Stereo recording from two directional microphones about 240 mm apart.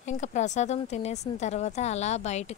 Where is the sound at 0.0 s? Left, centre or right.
Left.